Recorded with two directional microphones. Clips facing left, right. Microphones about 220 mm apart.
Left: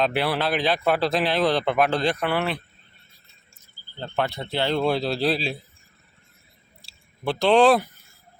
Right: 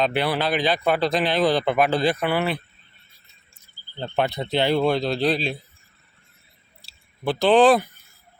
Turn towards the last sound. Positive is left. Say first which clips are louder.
# right 1 dB
turn(degrees=0)  # may be behind; listen again after turning